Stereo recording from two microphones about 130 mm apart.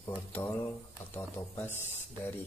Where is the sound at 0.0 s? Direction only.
15° left (ahead or behind).